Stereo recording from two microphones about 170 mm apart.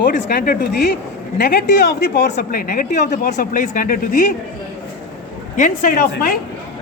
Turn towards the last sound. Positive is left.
turn(degrees=55)  # may be behind; listen again after turning